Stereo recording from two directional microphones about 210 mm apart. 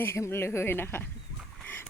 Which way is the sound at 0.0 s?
10° left (ahead or behind).